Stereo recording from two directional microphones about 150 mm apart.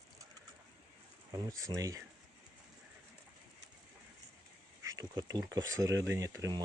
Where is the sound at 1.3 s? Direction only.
20° right (ahead or behind).